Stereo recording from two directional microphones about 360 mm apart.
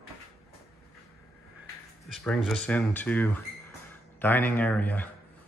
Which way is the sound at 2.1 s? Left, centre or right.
Centre.